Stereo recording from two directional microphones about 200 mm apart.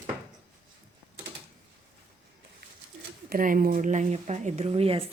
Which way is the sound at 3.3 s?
45° right (ahead or behind).